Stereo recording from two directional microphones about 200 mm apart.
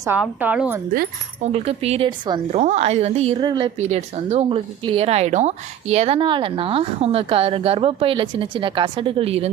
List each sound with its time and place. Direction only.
0.2 s a woman's voice: 5° right (ahead or behind)
1.4 s a woman's voice: 30° right (ahead or behind)
3.8 s speech: 35° right (ahead or behind)